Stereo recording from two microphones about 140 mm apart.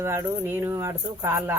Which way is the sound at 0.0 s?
20° right (ahead or behind).